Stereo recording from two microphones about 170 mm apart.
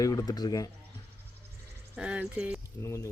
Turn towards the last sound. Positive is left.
turn(degrees=15)  # may be behind; listen again after turning